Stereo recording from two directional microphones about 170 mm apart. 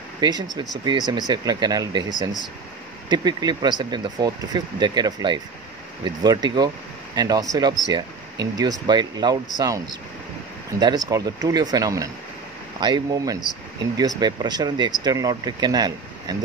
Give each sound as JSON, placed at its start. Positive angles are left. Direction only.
{"t": 0.2, "sound": "speech", "side_deg": -25}